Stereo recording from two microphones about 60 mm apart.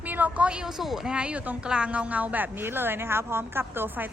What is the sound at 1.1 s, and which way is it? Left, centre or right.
A woman's voice, centre.